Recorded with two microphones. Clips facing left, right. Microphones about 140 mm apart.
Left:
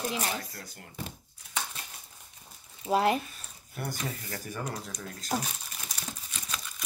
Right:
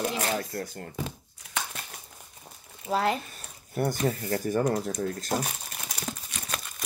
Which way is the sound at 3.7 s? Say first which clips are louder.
Right 9 dB; 40° right (ahead or behind).